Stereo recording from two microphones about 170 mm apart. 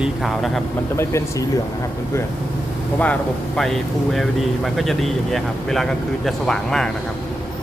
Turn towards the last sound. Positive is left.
turn(degrees=5)  # may be behind; listen again after turning